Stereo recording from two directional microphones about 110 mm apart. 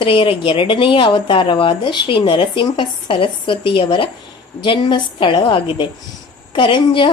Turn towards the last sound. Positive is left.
turn(degrees=50)  # may be behind; listen again after turning